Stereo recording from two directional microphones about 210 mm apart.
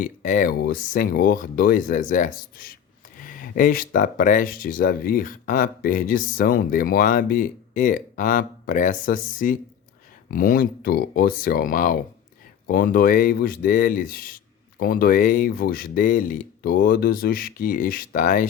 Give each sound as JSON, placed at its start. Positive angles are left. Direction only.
{"t": 0.0, "sound": "speech", "side_deg": 40}